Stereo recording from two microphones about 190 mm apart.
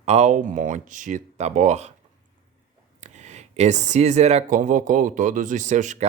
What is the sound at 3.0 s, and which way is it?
Speech, 35° right (ahead or behind).